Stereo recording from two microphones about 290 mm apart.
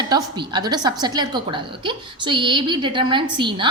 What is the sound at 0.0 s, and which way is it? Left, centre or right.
A woman's voice, centre.